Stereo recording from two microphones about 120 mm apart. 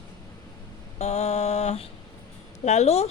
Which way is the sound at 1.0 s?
70° left (ahead or behind).